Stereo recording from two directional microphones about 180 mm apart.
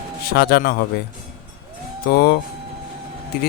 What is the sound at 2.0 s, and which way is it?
Speech, 60° left (ahead or behind).